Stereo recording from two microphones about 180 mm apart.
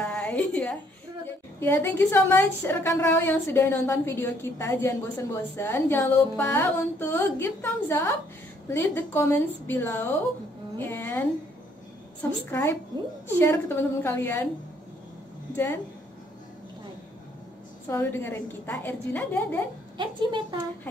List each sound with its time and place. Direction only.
0.0 s a sound: 5° left (ahead or behind)
1.2 s a woman's voice: 10° left (ahead or behind)
15.5 s a woman's voice: 10° left (ahead or behind)
17.8 s a woman's voice: 15° left (ahead or behind)
20.0 s a woman's voice: 25° right (ahead or behind)